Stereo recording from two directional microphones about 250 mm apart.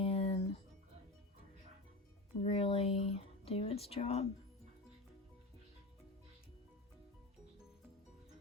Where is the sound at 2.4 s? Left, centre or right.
Left.